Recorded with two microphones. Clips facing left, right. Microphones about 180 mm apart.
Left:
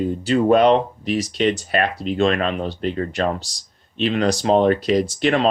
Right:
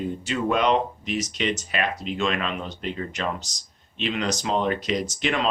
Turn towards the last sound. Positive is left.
turn(degrees=35)  # may be behind; listen again after turning